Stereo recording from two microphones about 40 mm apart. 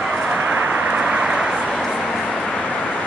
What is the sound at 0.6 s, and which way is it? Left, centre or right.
Vehicle, right.